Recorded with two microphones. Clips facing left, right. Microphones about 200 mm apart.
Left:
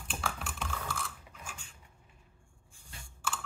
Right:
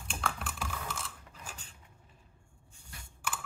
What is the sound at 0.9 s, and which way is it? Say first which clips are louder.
Chewing: left 2 dB; 35° right (ahead or behind).